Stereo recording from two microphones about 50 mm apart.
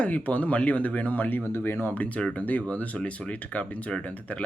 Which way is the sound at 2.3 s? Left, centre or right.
Left.